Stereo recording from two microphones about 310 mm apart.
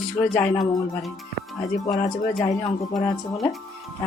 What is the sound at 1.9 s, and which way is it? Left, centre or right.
Speech, left.